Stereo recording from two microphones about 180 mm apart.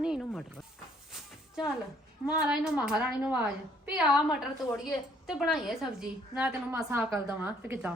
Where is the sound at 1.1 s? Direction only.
Centre (ahead or behind).